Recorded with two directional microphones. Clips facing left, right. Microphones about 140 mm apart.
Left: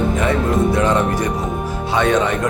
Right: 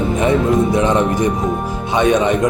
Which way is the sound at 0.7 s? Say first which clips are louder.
Right 2 dB; 20° right (ahead or behind).